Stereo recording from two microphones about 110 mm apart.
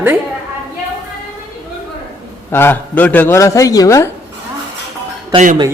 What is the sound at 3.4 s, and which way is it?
Speech, 30° left (ahead or behind).